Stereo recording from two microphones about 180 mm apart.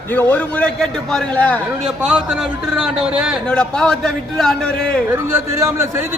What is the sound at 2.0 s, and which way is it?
A man's voice, 5° right (ahead or behind).